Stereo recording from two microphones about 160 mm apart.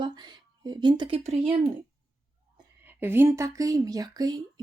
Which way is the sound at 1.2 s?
40° right (ahead or behind).